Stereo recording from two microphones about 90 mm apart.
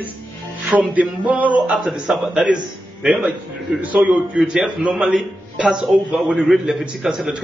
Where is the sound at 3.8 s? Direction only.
15° right (ahead or behind).